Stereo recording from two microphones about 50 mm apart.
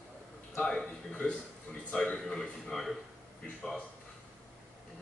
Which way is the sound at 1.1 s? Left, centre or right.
Left.